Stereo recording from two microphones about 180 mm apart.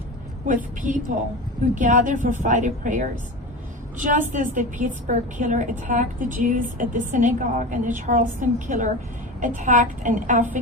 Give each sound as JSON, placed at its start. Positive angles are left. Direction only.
{"t": 0.4, "sound": "a woman's voice", "side_deg": -45}